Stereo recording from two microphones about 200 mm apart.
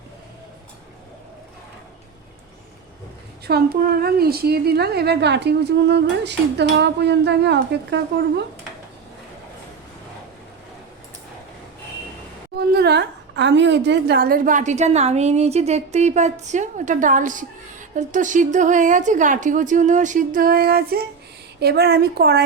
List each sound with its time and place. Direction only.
3.4 s a woman's voice: 50° right (ahead or behind)
12.5 s a woman's voice: 55° right (ahead or behind)